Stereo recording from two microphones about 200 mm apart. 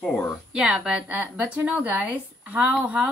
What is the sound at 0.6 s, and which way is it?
A woman's voice, 5° right (ahead or behind).